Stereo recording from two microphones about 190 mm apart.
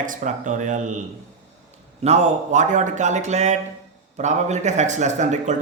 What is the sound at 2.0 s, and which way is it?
Speech, 35° right (ahead or behind).